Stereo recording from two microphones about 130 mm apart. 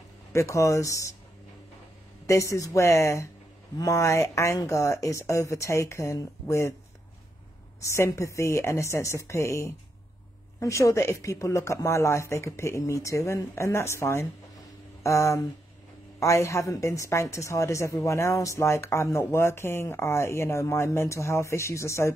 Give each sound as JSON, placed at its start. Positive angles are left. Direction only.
{"t": 0.3, "sound": "a woman's voice", "side_deg": 25}
{"t": 2.2, "sound": "a woman's voice", "side_deg": 25}
{"t": 7.8, "sound": "a woman's voice", "side_deg": 20}